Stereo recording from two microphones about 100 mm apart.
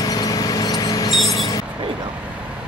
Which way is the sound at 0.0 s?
40° left (ahead or behind).